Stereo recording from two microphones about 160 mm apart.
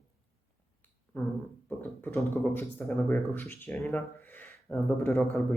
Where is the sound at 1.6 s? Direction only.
10° left (ahead or behind).